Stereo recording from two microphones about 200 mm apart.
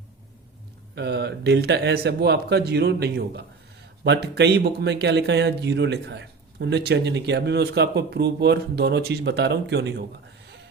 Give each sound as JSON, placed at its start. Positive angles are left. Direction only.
{"t": 0.9, "sound": "speech", "side_deg": -60}